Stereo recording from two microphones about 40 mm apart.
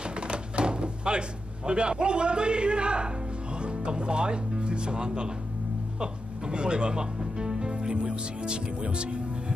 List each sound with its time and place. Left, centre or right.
0.0 s music: right
1.7 s a man's voice: right